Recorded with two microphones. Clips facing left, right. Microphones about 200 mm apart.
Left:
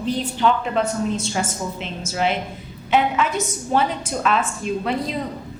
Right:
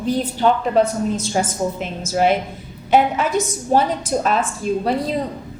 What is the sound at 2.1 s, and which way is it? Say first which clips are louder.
A woman's voice: right 6 dB; 45° right (ahead or behind).